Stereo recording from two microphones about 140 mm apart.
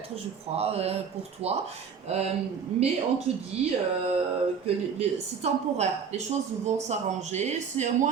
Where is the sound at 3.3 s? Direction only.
50° right (ahead or behind).